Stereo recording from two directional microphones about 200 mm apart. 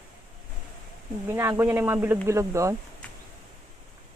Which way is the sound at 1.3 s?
10° right (ahead or behind).